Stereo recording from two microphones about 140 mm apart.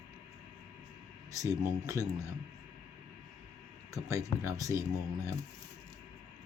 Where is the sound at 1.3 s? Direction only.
20° right (ahead or behind).